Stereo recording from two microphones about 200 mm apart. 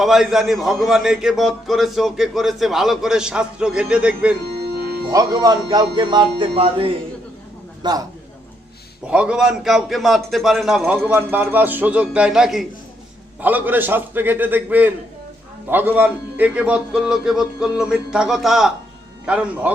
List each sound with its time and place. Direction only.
0.0 s a man's voice: centre (ahead or behind)
5.1 s a man's voice: 20° right (ahead or behind)
9.0 s a man's voice: 5° right (ahead or behind)